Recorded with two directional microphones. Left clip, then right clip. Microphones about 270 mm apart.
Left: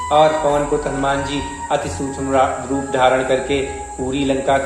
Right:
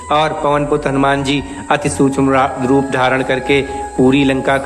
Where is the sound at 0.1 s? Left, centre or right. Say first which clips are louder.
Even; right.